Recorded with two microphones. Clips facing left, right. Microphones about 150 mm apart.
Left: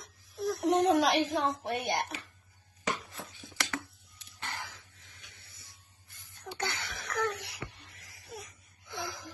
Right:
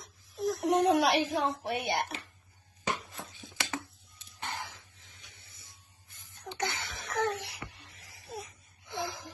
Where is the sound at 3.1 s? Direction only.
20° right (ahead or behind).